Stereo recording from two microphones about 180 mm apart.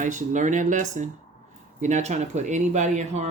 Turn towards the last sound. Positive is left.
turn(degrees=-40)  # may be behind; listen again after turning